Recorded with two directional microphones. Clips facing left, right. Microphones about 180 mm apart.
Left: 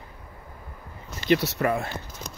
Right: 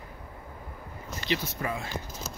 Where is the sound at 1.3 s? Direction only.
75° left (ahead or behind).